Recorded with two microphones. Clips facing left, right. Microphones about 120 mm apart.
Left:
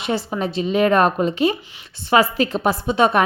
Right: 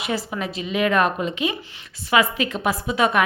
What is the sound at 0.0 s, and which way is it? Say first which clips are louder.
A woman's voice: left 4 dB; 30° left (ahead or behind).